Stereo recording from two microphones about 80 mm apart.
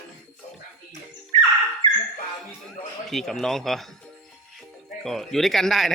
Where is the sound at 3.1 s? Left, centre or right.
Centre.